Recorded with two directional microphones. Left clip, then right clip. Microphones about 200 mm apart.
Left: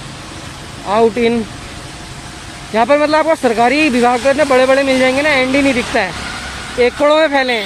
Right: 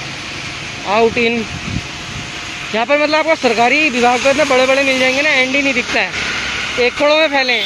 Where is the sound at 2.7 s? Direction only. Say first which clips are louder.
Left 2 dB; 5° left (ahead or behind).